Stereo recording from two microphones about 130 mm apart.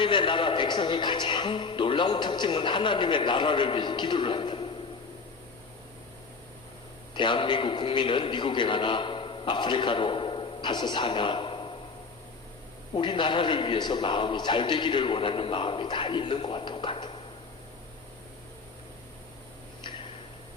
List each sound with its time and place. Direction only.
0.0 s speech: 40° left (ahead or behind)
7.1 s a man's voice: 40° left (ahead or behind)
12.9 s speech: 35° left (ahead or behind)